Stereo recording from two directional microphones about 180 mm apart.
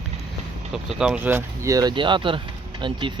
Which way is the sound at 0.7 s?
5° right (ahead or behind).